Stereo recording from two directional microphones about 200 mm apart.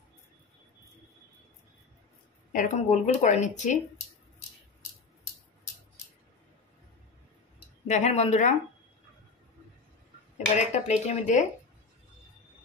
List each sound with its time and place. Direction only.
2.5 s speech: 40° left (ahead or behind)
7.9 s speech: 35° left (ahead or behind)
10.3 s speech: 35° left (ahead or behind)